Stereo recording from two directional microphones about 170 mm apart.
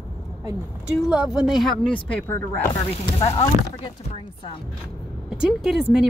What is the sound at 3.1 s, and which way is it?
Speech, 25° left (ahead or behind).